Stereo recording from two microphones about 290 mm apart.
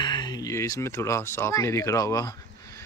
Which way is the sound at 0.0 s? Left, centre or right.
Centre.